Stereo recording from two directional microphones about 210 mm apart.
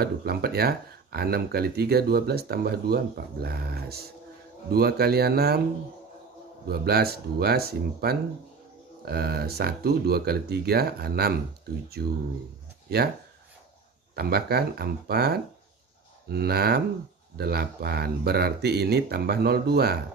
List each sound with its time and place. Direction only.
0.0 s speech: 50° right (ahead or behind)
6.7 s speech: 50° right (ahead or behind)
14.1 s speech: 50° right (ahead or behind)